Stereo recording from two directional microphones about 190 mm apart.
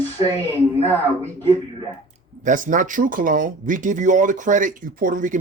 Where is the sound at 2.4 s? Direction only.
45° right (ahead or behind).